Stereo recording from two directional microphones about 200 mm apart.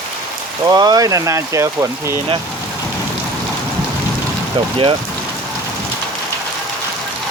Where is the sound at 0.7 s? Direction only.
20° right (ahead or behind).